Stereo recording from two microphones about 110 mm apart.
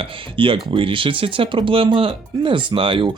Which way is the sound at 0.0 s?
55° right (ahead or behind).